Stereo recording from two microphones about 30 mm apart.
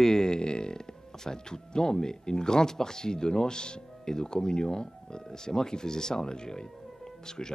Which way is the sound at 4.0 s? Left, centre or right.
Centre.